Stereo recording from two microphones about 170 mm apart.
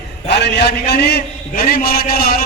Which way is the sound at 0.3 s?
80° left.